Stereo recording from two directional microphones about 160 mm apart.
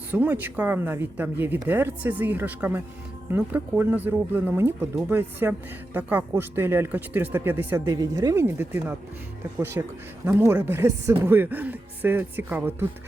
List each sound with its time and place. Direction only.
0.1 s speech: 10° right (ahead or behind)